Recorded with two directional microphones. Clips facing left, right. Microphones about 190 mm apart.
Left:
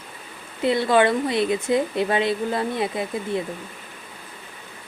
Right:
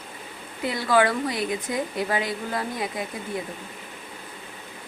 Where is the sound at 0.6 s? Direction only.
25° left (ahead or behind).